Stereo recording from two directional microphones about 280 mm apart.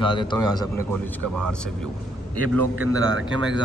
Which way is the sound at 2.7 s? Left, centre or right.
Right.